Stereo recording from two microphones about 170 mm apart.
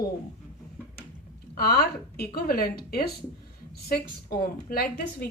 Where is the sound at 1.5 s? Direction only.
65° left (ahead or behind).